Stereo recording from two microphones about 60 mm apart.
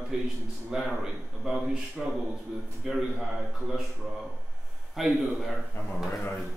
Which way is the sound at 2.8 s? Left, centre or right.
Centre.